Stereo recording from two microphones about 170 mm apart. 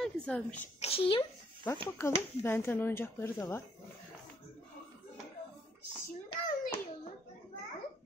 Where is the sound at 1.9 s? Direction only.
15° left (ahead or behind).